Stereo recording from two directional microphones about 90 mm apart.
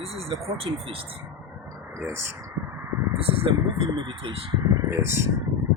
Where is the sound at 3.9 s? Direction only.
70° right (ahead or behind).